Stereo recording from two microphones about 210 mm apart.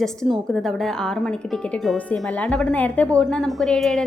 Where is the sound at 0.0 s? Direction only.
Centre (ahead or behind).